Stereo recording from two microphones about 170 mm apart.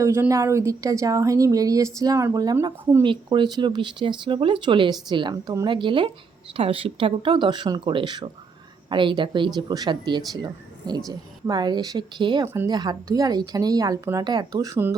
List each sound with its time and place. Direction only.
0.0 s speech: 15° right (ahead or behind)